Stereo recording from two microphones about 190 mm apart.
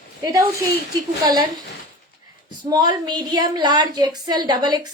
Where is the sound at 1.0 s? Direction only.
20° right (ahead or behind).